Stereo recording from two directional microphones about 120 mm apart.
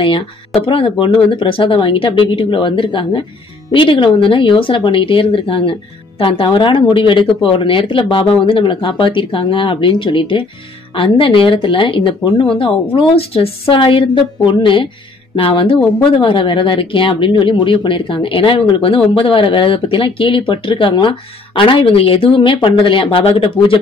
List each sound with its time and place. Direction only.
0.6 s speech: 50° left (ahead or behind)